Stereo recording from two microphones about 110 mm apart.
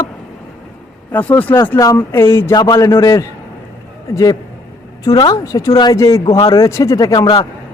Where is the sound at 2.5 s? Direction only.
35° left (ahead or behind).